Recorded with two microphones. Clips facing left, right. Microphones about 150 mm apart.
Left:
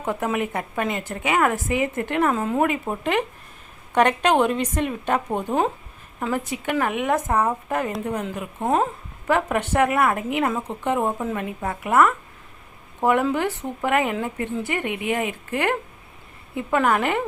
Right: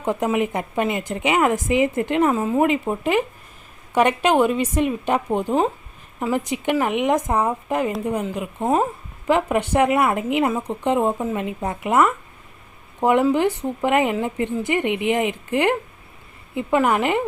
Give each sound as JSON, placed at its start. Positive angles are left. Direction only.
{"t": 0.0, "sound": "a woman's voice", "side_deg": -15}